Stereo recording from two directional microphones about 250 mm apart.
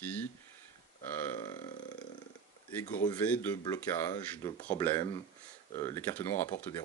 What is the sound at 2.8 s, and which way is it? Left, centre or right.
Speech, left.